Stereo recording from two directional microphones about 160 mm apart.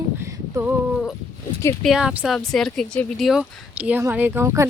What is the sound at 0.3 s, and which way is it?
Female singing, 15° right (ahead or behind).